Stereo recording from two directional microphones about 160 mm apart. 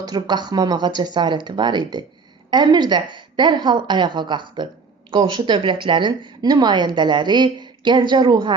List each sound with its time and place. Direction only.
0.0 s a woman's voice: 25° right (ahead or behind)